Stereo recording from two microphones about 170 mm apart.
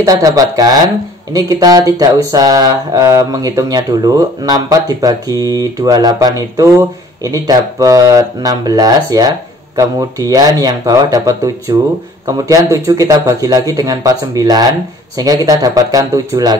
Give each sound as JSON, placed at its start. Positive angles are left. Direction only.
{"t": 0.0, "sound": "mantra", "side_deg": -20}